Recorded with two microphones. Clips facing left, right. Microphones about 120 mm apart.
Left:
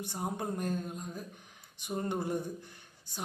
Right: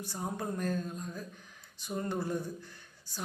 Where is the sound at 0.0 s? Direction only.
20° left (ahead or behind).